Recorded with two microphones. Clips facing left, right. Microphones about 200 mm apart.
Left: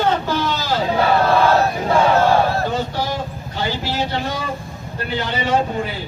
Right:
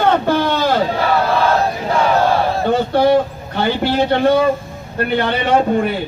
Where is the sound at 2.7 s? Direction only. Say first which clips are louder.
Right 9 dB; 60° right (ahead or behind).